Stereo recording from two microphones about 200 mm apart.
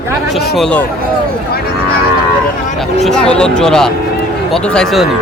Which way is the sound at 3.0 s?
5° left (ahead or behind).